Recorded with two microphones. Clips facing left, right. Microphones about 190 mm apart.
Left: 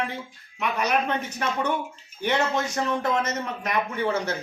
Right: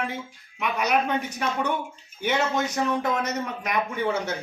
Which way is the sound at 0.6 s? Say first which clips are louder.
Right 1 dB; 10° right (ahead or behind).